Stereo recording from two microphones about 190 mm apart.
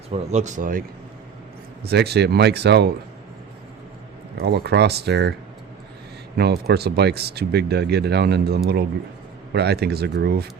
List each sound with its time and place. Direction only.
0.1 s speech: 35° right (ahead or behind)
1.8 s speech: 60° right (ahead or behind)
4.4 s speech: 55° right (ahead or behind)
6.3 s speech: 60° right (ahead or behind)